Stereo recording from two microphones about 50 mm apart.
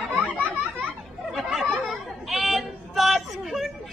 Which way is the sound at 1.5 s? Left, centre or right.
Centre.